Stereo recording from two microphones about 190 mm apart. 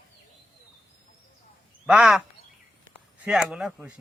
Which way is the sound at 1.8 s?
5° right (ahead or behind).